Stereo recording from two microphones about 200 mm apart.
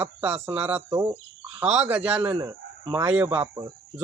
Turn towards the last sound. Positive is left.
turn(degrees=-10)  # may be behind; listen again after turning